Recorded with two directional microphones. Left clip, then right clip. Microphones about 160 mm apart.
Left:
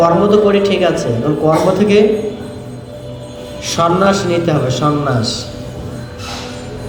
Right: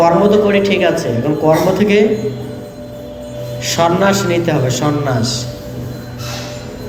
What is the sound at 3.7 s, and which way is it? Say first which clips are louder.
A man's voice: even; 30° left (ahead or behind).